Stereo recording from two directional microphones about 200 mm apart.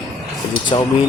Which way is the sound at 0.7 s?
25° left (ahead or behind).